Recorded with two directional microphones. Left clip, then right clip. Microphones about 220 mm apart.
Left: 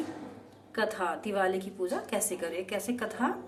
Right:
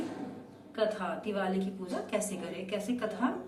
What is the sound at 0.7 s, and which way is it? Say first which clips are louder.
Speech: left 1 dB; 55° left (ahead or behind).